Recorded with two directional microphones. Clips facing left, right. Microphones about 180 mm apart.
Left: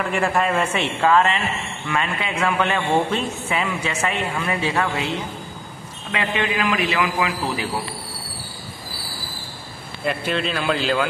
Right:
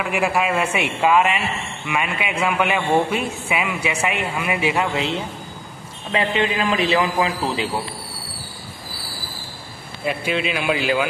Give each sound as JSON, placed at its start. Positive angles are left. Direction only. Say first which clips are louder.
{"t": 0.0, "sound": "a man's voice", "louder": "even", "side_deg": -10}
{"t": 6.1, "sound": "a man's voice", "louder": "right 3 dB", "side_deg": -30}
{"t": 10.0, "sound": "a man's voice", "louder": "right 1 dB", "side_deg": -10}